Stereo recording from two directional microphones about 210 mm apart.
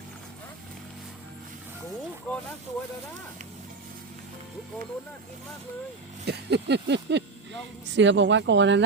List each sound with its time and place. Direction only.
2.3 s speech: 5° left (ahead or behind)
6.2 s a sound: 55° right (ahead or behind)
7.9 s speech: 60° right (ahead or behind)